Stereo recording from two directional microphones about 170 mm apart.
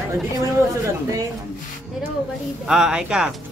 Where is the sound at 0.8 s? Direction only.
20° right (ahead or behind).